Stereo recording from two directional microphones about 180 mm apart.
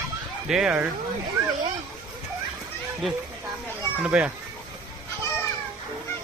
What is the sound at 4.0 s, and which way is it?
Speech, 5° right (ahead or behind).